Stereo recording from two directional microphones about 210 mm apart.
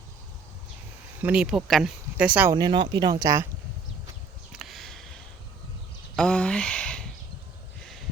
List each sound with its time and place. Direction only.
1.2 s speech: 5° right (ahead or behind)
2.6 s speech: 20° right (ahead or behind)
4.5 s a sound: centre (ahead or behind)